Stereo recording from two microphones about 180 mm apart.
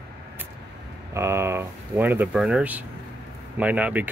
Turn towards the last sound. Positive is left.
turn(degrees=-10)  # may be behind; listen again after turning